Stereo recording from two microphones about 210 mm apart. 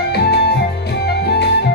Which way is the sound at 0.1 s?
50° left (ahead or behind).